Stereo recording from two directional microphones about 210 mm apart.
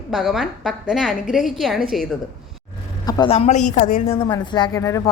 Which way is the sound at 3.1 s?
25° left (ahead or behind).